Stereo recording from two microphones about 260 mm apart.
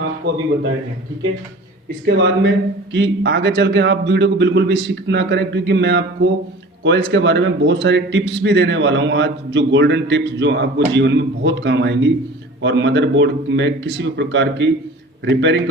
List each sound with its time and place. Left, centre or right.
2.0 s a man's voice: right